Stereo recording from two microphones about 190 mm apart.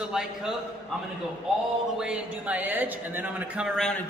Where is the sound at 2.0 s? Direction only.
5° right (ahead or behind).